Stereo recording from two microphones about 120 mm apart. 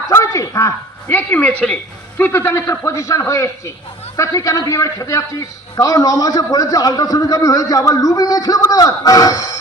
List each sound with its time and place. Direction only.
0.1 s a man's voice: 25° left (ahead or behind)